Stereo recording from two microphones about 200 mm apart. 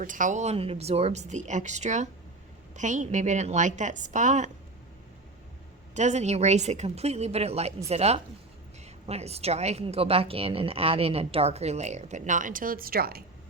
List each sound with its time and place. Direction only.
0.0 s a woman's voice: 40° right (ahead or behind)
5.9 s a woman's voice: 35° right (ahead or behind)